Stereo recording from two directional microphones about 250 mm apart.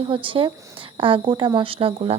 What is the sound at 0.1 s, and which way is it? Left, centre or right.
A woman's voice, centre.